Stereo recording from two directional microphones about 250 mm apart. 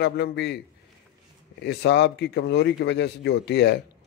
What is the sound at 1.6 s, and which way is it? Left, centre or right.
A man's voice, left.